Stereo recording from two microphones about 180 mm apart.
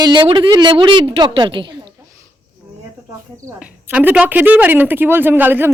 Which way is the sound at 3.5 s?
10° right (ahead or behind).